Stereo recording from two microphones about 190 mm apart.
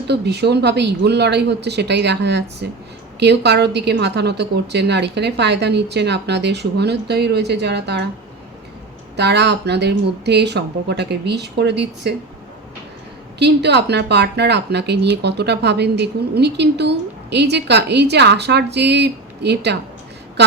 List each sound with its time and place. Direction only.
0.1 s speech: 60° right (ahead or behind)
9.1 s speech: 65° right (ahead or behind)
13.4 s speech: 65° right (ahead or behind)